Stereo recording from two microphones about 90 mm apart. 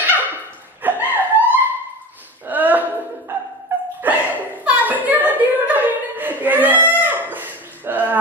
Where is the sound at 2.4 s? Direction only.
20° right (ahead or behind).